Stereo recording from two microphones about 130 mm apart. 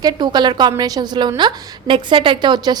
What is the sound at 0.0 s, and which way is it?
A woman's voice, 30° right (ahead or behind).